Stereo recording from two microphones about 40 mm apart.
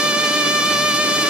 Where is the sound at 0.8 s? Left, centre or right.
Right.